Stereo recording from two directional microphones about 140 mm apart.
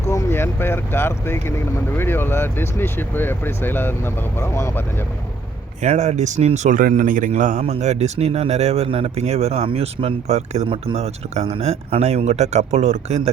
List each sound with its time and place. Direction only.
0.1 s speech: 20° left (ahead or behind)
5.8 s a man's voice: 55° right (ahead or behind)